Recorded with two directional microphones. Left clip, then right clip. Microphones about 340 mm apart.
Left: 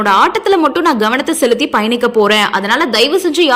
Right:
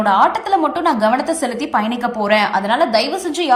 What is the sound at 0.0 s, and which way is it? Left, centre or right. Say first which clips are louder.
Speech: left 3 dB; centre.